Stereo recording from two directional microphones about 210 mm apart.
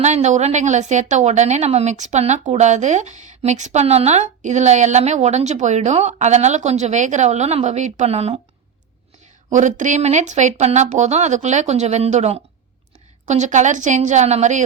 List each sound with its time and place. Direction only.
0.0 s a woman's voice: 35° right (ahead or behind)
9.5 s a woman's voice: 35° right (ahead or behind)